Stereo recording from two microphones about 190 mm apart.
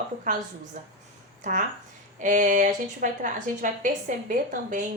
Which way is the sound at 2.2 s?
40° right (ahead or behind).